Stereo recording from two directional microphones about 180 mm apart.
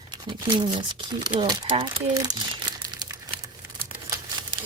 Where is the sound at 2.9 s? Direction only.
20° right (ahead or behind).